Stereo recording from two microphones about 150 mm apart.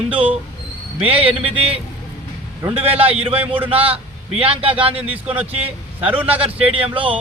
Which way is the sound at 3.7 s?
40° right (ahead or behind).